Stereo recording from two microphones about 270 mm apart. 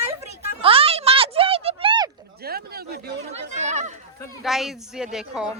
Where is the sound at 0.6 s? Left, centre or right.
Right.